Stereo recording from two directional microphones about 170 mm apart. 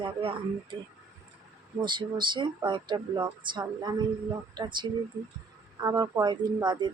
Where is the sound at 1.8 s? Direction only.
25° right (ahead or behind).